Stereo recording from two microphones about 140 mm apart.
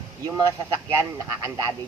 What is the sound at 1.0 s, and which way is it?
Speech, 20° right (ahead or behind).